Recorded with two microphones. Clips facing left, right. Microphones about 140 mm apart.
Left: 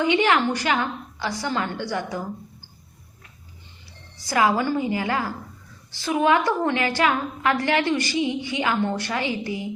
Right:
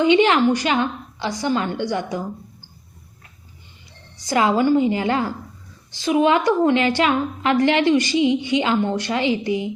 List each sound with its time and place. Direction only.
0.0 s a woman's voice: 20° right (ahead or behind)
4.2 s a woman's voice: 20° right (ahead or behind)